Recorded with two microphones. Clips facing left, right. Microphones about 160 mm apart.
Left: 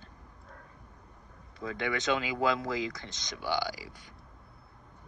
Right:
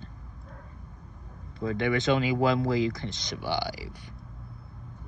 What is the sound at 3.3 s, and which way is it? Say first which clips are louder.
Speech: right 1 dB; 25° right (ahead or behind).